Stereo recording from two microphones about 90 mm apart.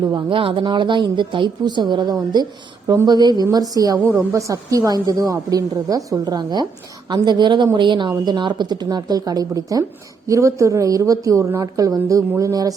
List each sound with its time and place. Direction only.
0.3 s a woman's voice: 75° right (ahead or behind); by 12.7 s 40° right (ahead or behind)